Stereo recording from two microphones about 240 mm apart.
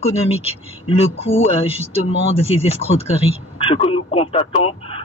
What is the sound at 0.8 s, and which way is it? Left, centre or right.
Speech, left.